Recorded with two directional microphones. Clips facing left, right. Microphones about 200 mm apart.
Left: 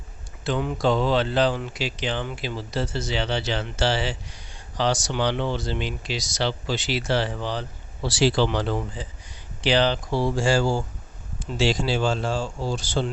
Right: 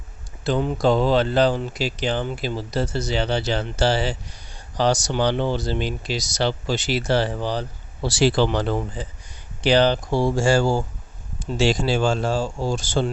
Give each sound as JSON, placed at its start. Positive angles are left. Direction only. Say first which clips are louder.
{"t": 0.4, "sound": "speech", "louder": "right 3 dB", "side_deg": -35}
{"t": 8.0, "sound": "speech", "louder": "right 2 dB", "side_deg": -50}